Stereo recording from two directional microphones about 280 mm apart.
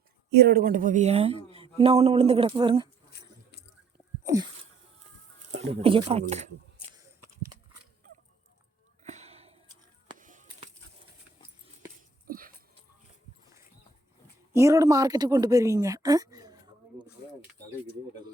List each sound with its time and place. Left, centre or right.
0.3 s speech: right; by 2.9 s centre
4.2 s a sound: centre
5.5 s speech: centre
9.0 s a sound: right
12.2 s dog: right
14.5 s a woman's voice: centre